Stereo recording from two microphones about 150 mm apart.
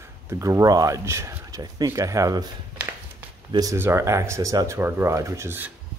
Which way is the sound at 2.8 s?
10° right (ahead or behind).